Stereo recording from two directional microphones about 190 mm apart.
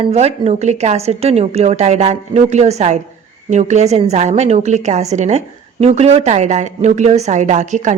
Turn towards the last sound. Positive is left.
turn(degrees=-40)  # may be behind; listen again after turning